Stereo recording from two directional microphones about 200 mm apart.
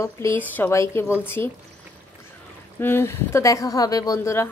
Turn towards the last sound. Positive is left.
turn(degrees=15)  # may be behind; listen again after turning